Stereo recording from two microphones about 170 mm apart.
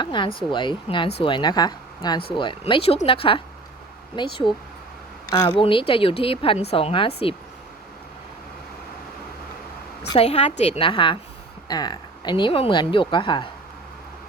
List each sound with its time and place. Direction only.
0.0 s speech: 30° left (ahead or behind)
5.5 s a woman's voice: 30° left (ahead or behind)
10.2 s a woman's voice: 35° left (ahead or behind)